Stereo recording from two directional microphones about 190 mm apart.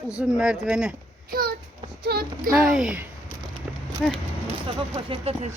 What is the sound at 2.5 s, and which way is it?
Speech, centre (ahead or behind).